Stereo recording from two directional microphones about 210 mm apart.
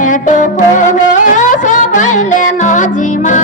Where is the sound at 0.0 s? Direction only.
35° left (ahead or behind).